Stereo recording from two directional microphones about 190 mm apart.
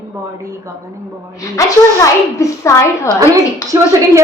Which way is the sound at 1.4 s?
15° left (ahead or behind).